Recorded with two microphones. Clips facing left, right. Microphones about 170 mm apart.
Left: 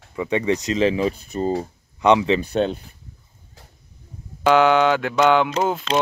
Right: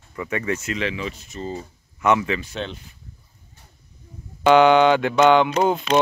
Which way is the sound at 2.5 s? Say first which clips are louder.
Left 10 dB; 45° left (ahead or behind).